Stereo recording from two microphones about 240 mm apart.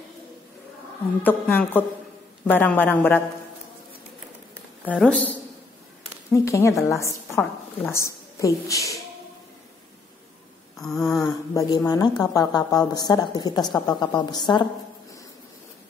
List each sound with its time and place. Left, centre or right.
1.2 s a woman's voice: centre
4.8 s a woman's voice: centre
10.8 s a sound: centre
11.2 s a woman's voice: centre